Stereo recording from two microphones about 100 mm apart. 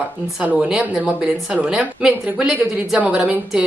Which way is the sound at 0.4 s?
10° right (ahead or behind).